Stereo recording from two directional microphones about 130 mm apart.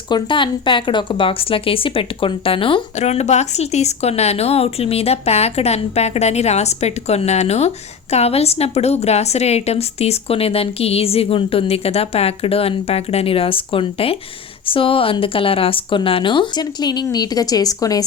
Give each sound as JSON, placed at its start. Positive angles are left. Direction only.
{"t": 0.1, "sound": "a woman's voice", "side_deg": 40}
{"t": 3.0, "sound": "a woman's voice", "side_deg": 55}